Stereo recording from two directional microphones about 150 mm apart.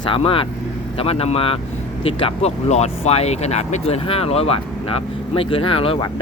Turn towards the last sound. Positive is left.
turn(degrees=35)  # may be behind; listen again after turning